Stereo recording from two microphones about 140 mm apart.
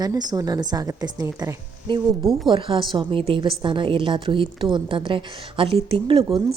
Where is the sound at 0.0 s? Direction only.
30° right (ahead or behind).